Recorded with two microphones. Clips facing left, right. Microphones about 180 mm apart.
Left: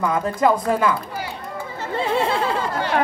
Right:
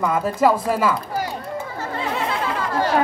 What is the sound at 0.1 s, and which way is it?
Speech, 5° right (ahead or behind).